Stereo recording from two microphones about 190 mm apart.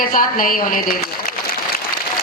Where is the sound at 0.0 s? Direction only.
50° left (ahead or behind).